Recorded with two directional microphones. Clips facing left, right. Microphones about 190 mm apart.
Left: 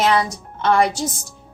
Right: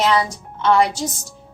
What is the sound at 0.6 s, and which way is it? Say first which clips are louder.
Speech: right 1 dB; 55° left (ahead or behind).